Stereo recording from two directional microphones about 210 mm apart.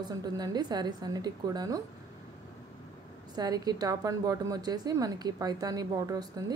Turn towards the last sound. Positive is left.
turn(degrees=-15)  # may be behind; listen again after turning